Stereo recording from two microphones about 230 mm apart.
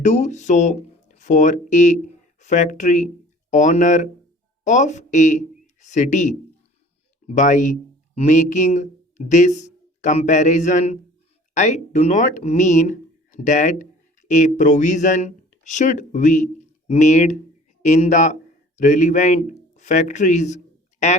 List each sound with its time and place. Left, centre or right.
0.0 s a man's voice: left